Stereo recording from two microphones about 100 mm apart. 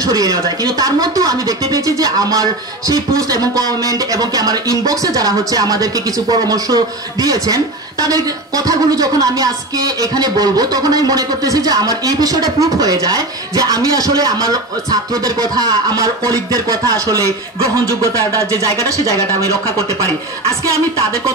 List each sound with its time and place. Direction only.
0.0 s speech: 35° right (ahead or behind)
18.8 s speech: 35° left (ahead or behind)